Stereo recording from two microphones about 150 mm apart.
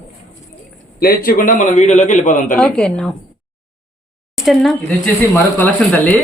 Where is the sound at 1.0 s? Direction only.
75° left (ahead or behind); by 2.6 s 55° left (ahead or behind).